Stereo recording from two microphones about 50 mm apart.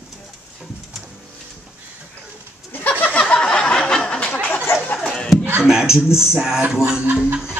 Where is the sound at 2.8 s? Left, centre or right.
Left.